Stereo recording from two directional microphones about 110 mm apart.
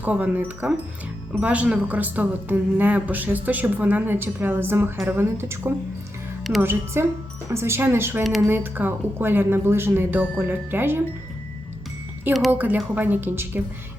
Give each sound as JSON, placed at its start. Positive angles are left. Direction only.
{"t": 0.0, "sound": "a woman's voice", "side_deg": -15}
{"t": 12.5, "sound": "a woman's voice", "side_deg": -15}